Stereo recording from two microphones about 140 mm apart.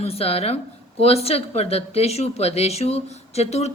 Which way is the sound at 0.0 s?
45° left (ahead or behind).